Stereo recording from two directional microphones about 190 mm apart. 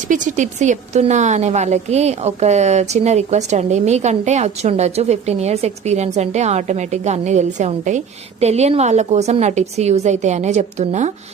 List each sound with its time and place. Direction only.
0.1 s a woman's voice: 40° right (ahead or behind)